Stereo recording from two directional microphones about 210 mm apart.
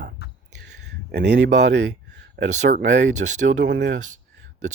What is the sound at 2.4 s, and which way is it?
Speech, 55° right (ahead or behind).